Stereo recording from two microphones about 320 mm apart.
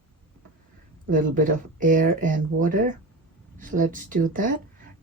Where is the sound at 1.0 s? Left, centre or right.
Right.